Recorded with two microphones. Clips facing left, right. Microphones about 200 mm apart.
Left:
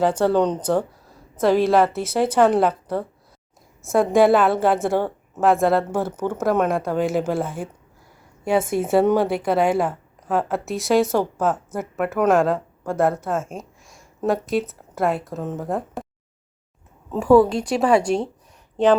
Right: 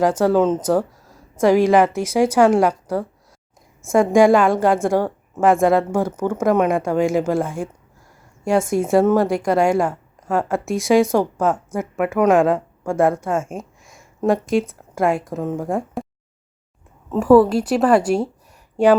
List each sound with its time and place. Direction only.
0.0 s speech: 10° right (ahead or behind)
3.8 s a woman's voice: centre (ahead or behind)
4.9 s a woman's voice: 5° right (ahead or behind)
13.8 s a sound: centre (ahead or behind)
14.5 s a woman's voice: centre (ahead or behind)
17.1 s a woman's voice: 5° right (ahead or behind)